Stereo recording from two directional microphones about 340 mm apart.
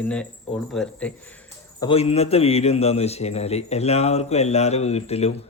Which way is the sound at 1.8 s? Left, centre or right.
Centre.